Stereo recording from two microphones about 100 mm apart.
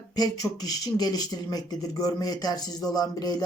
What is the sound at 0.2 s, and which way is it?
A man's voice, 40° left (ahead or behind).